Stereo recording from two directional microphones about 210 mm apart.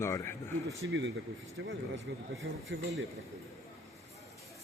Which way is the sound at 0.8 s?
60° right (ahead or behind).